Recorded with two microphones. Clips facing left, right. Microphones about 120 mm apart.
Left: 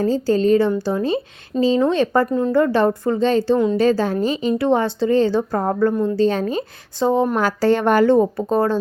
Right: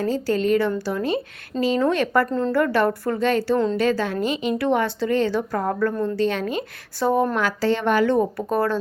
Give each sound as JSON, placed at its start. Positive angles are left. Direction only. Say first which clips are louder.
{"t": 0.0, "sound": "a woman's voice", "louder": "left 5 dB", "side_deg": 30}
{"t": 2.2, "sound": "a woman's voice", "louder": "left 4 dB", "side_deg": 10}
{"t": 2.6, "sound": "a woman's voice", "louder": "left 4 dB", "side_deg": 25}
{"t": 7.0, "sound": "a woman's voice", "louder": "left 3 dB", "side_deg": 25}
{"t": 7.3, "sound": "a woman's voice", "louder": "left 4 dB", "side_deg": 40}
{"t": 8.1, "sound": "a woman's voice", "louder": "left 5 dB", "side_deg": 25}